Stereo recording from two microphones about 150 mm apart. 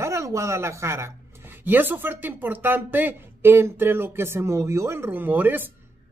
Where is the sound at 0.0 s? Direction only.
20° right (ahead or behind).